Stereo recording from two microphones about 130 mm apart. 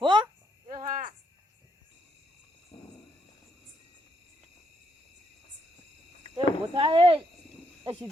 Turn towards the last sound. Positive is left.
turn(degrees=-45)  # may be behind; listen again after turning